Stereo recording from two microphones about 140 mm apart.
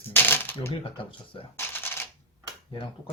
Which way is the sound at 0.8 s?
40° left (ahead or behind).